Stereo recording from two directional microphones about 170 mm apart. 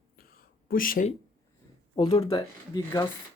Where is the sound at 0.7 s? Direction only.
55° left (ahead or behind).